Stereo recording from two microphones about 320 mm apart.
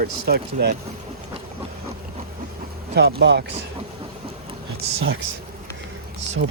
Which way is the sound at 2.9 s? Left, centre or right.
Right.